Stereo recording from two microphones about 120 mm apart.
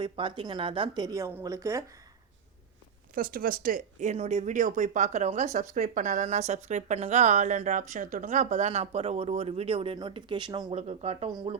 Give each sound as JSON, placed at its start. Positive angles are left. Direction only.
{"t": 0.0, "sound": "a woman's voice", "side_deg": -40}
{"t": 1.0, "sound": "speech", "side_deg": -25}
{"t": 3.8, "sound": "speech", "side_deg": -75}
{"t": 10.8, "sound": "speech", "side_deg": -60}
{"t": 11.5, "sound": "a woman's voice", "side_deg": -50}